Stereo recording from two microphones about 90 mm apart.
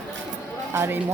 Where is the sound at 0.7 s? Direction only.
25° right (ahead or behind).